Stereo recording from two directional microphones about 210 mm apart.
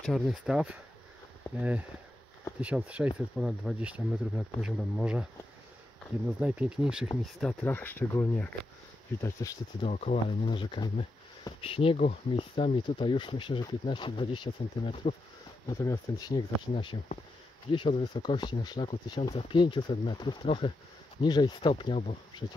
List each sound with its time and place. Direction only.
0.0 s speech: centre (ahead or behind)
6.4 s speech: 5° right (ahead or behind); by 9.8 s 15° left (ahead or behind)
9.8 s speech: 30° left (ahead or behind)